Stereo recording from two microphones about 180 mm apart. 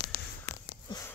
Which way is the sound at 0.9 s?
15° left (ahead or behind).